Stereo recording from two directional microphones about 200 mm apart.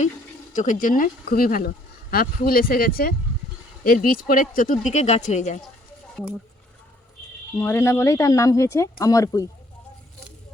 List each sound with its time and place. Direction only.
0.5 s speech: 40° left (ahead or behind)
7.5 s speech: 15° left (ahead or behind)